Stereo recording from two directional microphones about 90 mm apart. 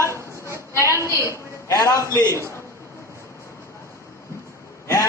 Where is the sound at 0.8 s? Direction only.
35° left (ahead or behind).